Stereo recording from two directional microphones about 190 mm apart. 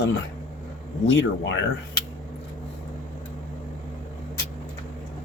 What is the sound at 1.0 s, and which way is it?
Speech, 75° left (ahead or behind).